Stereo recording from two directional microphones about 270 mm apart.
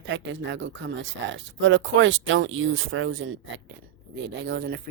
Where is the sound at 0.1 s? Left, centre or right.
Right.